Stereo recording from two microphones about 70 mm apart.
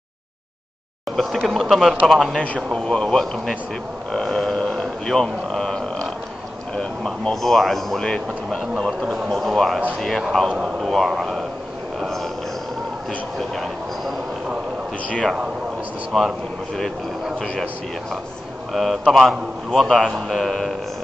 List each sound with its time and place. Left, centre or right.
1.1 s a man's voice: centre
2.3 s a man's voice: centre
2.7 s speech: centre
4.1 s a sound: centre
6.7 s a man's voice: centre
10.5 s a man's voice: centre
13.6 s speech: centre
16.1 s a man's voice: centre
18.7 s a man's voice: centre